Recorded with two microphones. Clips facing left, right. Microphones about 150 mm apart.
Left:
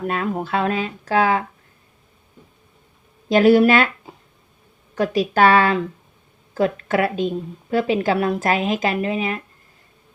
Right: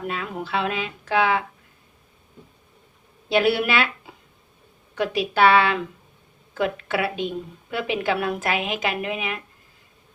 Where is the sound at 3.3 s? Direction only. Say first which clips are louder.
Left 7 dB; 40° left (ahead or behind).